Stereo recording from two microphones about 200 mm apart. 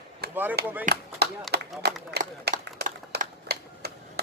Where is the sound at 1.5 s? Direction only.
55° right (ahead or behind).